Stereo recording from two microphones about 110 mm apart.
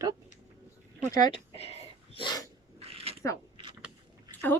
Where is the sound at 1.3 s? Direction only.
65° left (ahead or behind).